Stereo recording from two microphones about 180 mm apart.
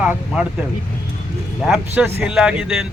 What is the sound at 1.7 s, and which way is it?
Speech, 10° right (ahead or behind).